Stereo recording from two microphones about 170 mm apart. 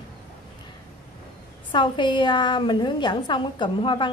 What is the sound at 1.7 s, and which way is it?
A woman's voice, 25° left (ahead or behind).